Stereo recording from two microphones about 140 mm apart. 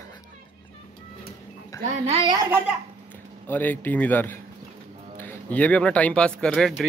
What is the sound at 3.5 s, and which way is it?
A man's voice, 15° left (ahead or behind).